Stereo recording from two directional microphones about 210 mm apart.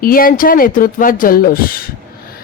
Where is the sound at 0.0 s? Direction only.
45° left (ahead or behind).